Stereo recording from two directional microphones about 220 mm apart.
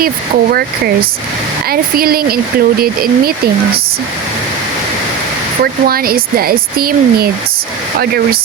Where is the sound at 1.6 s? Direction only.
45° right (ahead or behind).